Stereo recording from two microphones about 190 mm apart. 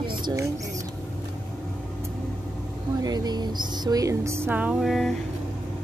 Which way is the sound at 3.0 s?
20° right (ahead or behind).